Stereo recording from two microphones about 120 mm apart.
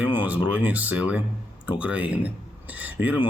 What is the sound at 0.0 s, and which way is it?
A man's voice, 15° right (ahead or behind).